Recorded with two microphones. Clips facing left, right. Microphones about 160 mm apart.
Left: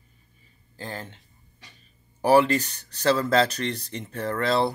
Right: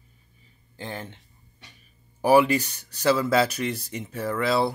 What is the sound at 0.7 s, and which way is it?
Speech, 20° right (ahead or behind).